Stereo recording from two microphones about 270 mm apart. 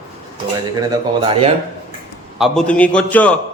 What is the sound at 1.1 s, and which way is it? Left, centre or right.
Speech, centre.